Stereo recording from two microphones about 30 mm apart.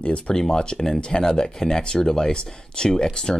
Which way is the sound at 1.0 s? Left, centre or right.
Left.